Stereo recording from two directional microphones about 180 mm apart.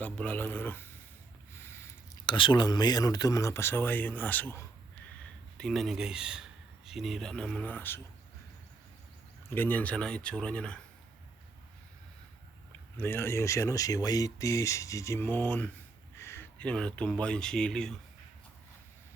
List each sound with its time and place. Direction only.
0.0 s speech: 10° left (ahead or behind)
1.5 s a sound: 15° left (ahead or behind)
2.3 s speech: 25° left (ahead or behind)
9.6 s speech: 10° left (ahead or behind)
13.0 s speech: 10° left (ahead or behind)